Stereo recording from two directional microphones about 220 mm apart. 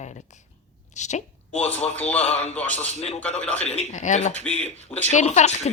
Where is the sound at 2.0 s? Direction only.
5° left (ahead or behind).